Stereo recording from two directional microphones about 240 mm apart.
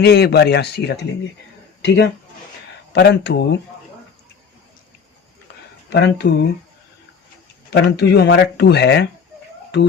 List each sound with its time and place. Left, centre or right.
0.0 s speech: left
5.9 s speech: left
7.7 s speech: left